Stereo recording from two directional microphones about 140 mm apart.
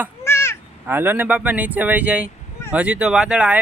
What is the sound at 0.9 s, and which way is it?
Speech, 15° right (ahead or behind).